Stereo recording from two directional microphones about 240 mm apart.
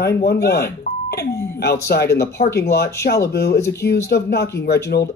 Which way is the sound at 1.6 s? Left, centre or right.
Left.